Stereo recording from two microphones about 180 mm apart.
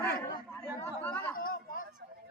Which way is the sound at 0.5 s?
15° left (ahead or behind).